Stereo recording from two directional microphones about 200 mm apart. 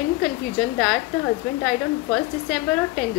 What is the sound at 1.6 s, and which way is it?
Speech, centre (ahead or behind).